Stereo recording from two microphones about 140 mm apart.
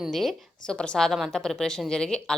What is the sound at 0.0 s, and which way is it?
A woman's voice, centre (ahead or behind).